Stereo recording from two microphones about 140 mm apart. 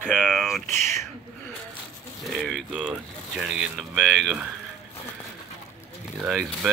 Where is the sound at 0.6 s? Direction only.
60° right (ahead or behind).